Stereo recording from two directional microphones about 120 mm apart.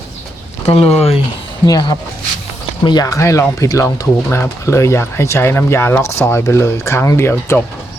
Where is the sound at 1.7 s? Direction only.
35° left (ahead or behind).